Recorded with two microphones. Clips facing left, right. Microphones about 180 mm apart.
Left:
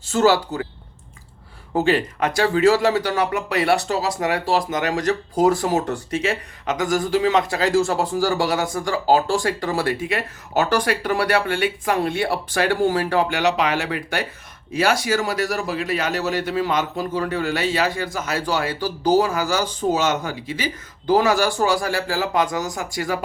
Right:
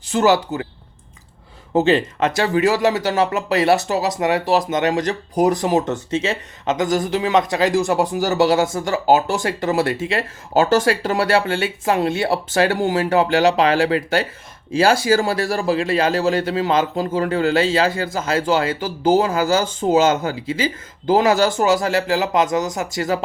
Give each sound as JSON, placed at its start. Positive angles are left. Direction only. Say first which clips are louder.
{"t": 0.1, "sound": "speech", "louder": "right 1 dB", "side_deg": -20}
{"t": 1.7, "sound": "speech", "louder": "right 3 dB", "side_deg": -25}